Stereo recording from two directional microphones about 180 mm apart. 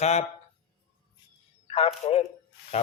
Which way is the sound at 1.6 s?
35° left (ahead or behind).